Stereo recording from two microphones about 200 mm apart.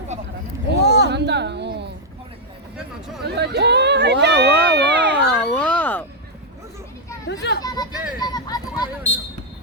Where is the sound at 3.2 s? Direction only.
55° right (ahead or behind).